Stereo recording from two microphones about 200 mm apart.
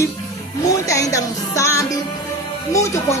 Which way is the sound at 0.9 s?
15° left (ahead or behind).